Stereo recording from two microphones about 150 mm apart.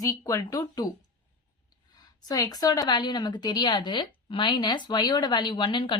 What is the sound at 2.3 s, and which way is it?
A woman's voice, 25° left (ahead or behind).